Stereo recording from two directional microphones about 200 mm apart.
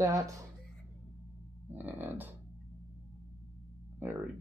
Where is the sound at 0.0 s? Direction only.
15° right (ahead or behind).